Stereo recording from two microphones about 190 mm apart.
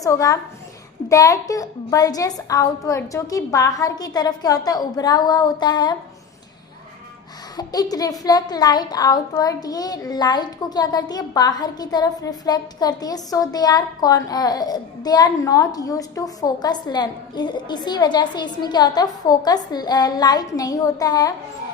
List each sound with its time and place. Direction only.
0.0 s a woman's voice: 20° left (ahead or behind)
7.5 s a child's voice: 20° left (ahead or behind)